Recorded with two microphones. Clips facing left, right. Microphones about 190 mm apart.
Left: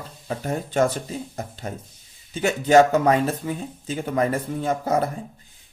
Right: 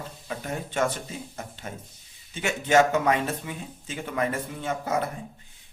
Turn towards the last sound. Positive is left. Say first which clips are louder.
# left 5 dB
turn(degrees=35)  # may be behind; listen again after turning